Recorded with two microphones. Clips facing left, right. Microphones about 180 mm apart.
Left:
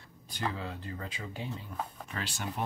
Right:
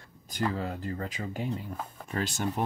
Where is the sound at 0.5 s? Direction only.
40° right (ahead or behind).